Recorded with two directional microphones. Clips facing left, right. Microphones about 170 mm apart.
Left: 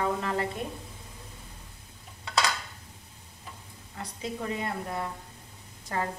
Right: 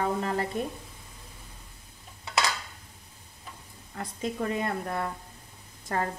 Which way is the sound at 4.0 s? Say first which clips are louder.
Right 3 dB; 50° right (ahead or behind).